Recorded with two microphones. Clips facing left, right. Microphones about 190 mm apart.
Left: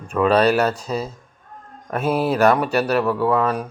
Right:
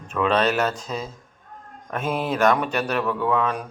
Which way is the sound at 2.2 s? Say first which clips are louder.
Left 3 dB; 10° left (ahead or behind).